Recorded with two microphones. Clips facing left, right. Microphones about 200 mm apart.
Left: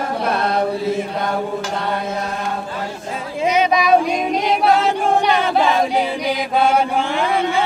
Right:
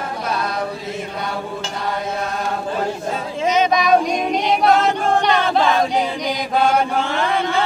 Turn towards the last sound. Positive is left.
turn(degrees=10)  # may be behind; listen again after turning